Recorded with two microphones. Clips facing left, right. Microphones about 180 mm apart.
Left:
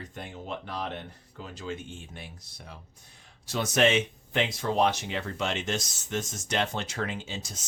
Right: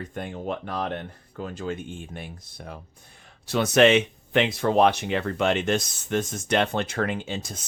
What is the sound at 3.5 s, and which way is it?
Speech, 65° right (ahead or behind).